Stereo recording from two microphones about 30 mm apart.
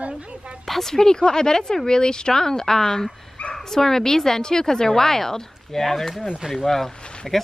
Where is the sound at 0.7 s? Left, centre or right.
Centre.